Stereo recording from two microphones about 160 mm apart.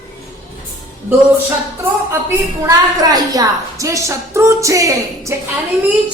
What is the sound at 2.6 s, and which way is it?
A woman's voice, 20° right (ahead or behind).